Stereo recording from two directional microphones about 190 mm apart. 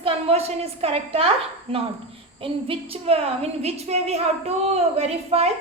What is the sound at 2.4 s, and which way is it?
A woman's voice, 30° right (ahead or behind).